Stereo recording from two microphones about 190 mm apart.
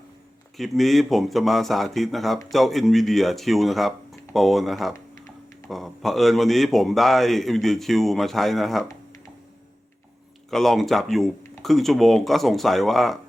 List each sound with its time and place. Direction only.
0.5 s speech: centre (ahead or behind)
10.5 s speech: centre (ahead or behind)